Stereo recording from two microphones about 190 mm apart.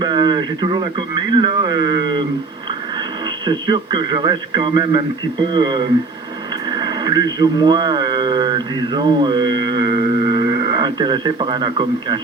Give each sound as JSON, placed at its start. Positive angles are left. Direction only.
{"t": 0.0, "sound": "speech", "side_deg": -25}
{"t": 3.2, "sound": "speech", "side_deg": -25}